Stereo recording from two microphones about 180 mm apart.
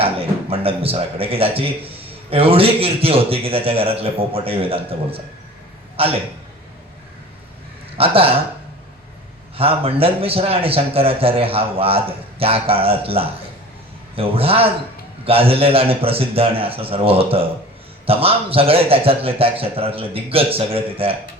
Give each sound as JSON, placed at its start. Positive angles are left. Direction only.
{"t": 0.0, "sound": "speech", "side_deg": -30}
{"t": 7.9, "sound": "speech", "side_deg": -30}
{"t": 9.6, "sound": "speech", "side_deg": -30}